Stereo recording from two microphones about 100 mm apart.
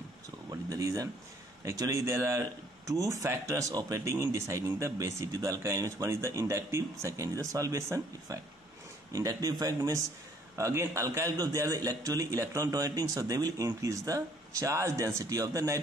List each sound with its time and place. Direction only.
0.5 s a man's voice: 35° right (ahead or behind)